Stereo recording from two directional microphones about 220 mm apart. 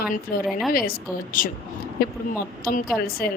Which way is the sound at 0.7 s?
40° left (ahead or behind).